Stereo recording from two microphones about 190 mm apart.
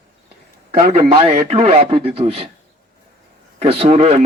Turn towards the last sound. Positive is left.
turn(degrees=-35)  # may be behind; listen again after turning